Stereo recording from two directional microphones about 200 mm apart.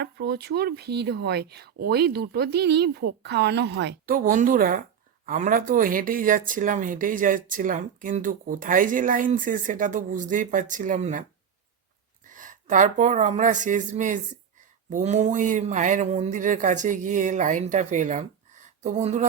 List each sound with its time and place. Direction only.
0.0 s speech: 55° right (ahead or behind)
4.1 s speech: 45° right (ahead or behind)
12.3 s speech: 40° right (ahead or behind)